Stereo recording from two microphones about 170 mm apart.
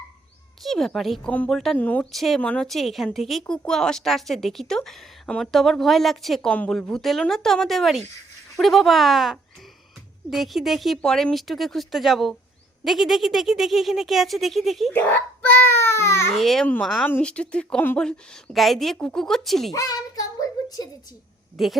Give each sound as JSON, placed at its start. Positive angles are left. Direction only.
{"t": 0.6, "sound": "a woman's voice", "side_deg": 0}
{"t": 14.9, "sound": "a child's voice", "side_deg": 10}
{"t": 16.3, "sound": "a woman's voice", "side_deg": 0}
{"t": 19.7, "sound": "child singing", "side_deg": 20}
{"t": 21.6, "sound": "a woman's voice", "side_deg": 0}